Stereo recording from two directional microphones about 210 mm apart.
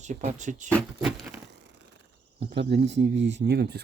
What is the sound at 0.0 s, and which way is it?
Speech, 35° right (ahead or behind).